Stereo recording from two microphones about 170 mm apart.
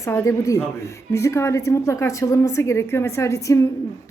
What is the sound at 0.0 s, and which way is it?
A woman's voice, 15° left (ahead or behind).